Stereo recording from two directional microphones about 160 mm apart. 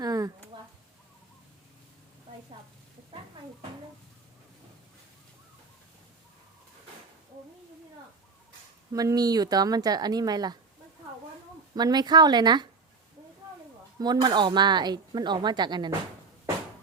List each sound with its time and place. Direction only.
0.0 s a sound: 20° right (ahead or behind)
8.9 s speech: 20° right (ahead or behind)
11.7 s speech: 25° right (ahead or behind)
14.0 s speech: 25° right (ahead or behind)